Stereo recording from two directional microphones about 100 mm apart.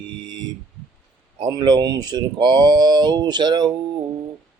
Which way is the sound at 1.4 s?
45° right (ahead or behind).